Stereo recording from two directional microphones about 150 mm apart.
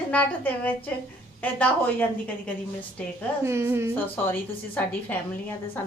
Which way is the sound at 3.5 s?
15° right (ahead or behind).